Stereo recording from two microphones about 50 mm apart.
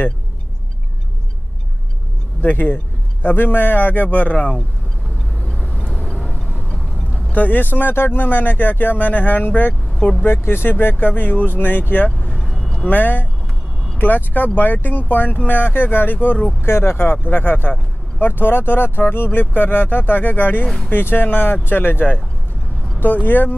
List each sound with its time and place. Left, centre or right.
2.4 s speech: left
5.8 s vehicle: left
7.3 s speech: left
10.2 s speech: left
12.4 s vehicle: centre
12.8 s speech: left
16.6 s speech: left
20.6 s speech: centre
20.9 s speech: left
23.0 s speech: left